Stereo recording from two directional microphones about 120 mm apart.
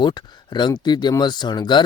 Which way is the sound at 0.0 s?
40° left (ahead or behind).